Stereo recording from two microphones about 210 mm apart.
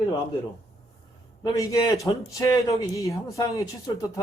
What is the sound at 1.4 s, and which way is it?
Speech, 15° left (ahead or behind).